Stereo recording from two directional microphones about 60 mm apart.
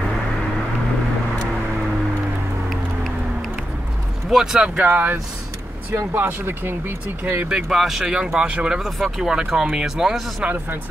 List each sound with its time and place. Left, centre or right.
4.3 s speech: centre
4.7 s speech: right
7.4 s speech: centre
8.8 s speech: centre
10.4 s speech: right